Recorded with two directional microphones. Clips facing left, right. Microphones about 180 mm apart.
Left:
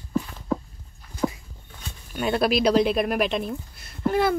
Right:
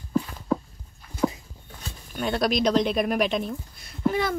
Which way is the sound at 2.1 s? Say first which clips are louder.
Left 2 dB; 5° left (ahead or behind).